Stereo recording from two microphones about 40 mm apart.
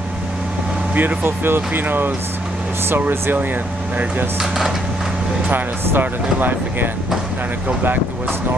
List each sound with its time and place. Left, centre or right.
1.2 s speech: right
4.4 s speech: centre
5.5 s speech: right